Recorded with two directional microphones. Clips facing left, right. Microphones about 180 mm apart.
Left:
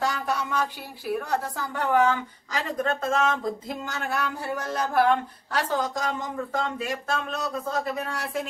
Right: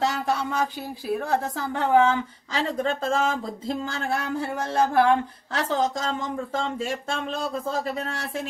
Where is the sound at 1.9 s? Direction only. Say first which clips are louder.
Right 3 dB; 25° right (ahead or behind).